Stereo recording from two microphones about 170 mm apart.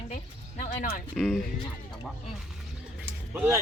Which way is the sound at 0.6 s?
40° left (ahead or behind).